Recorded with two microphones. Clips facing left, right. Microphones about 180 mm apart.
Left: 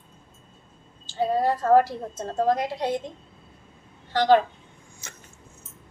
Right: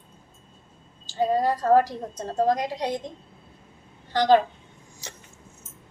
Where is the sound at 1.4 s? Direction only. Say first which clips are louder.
Left 2 dB; 15° right (ahead or behind).